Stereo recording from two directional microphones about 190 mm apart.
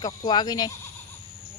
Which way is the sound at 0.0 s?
20° left (ahead or behind).